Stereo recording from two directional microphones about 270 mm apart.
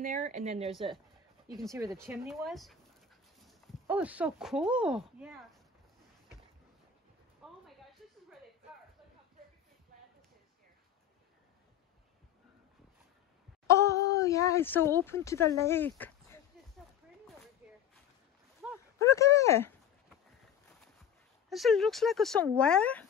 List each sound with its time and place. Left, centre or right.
0.0 s a woman's voice: right
1.7 s speech: centre
2.3 s speech: centre
7.4 s a sound: centre
13.7 s speech: centre
17.6 s a sound: centre
18.9 s speech: centre
21.5 s speech: centre